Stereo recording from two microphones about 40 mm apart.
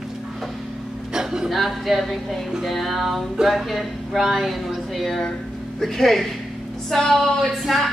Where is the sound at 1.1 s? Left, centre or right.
Centre.